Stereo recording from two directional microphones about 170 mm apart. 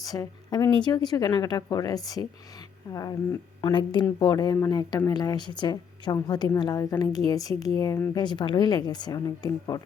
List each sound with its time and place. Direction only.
0.0 s a woman's voice: 20° left (ahead or behind)